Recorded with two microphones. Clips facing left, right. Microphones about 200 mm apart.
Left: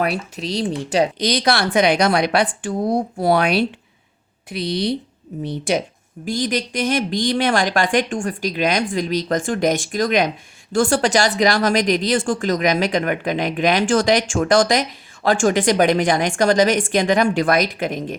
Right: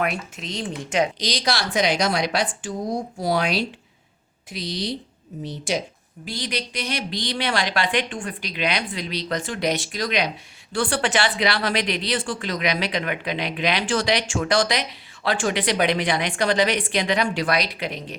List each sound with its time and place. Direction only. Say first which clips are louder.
0.0 s speech: left 4 dB; 35° left (ahead or behind)
1.2 s a woman's voice: left 7 dB; 55° left (ahead or behind)
6.2 s speech: left 8 dB; 45° left (ahead or behind)